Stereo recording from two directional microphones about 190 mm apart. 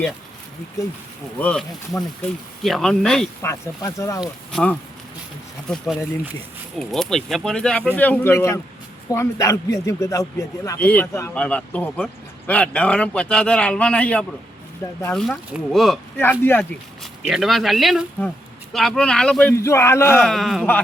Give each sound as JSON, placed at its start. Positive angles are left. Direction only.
{"t": 1.4, "sound": "speech", "side_deg": 5}
{"t": 3.4, "sound": "a man's voice", "side_deg": 15}
{"t": 4.2, "sound": "a man's voice", "side_deg": 5}
{"t": 16.1, "sound": "a man's voice", "side_deg": 10}
{"t": 17.0, "sound": "a man's voice", "side_deg": 0}
{"t": 20.2, "sound": "speech", "side_deg": 0}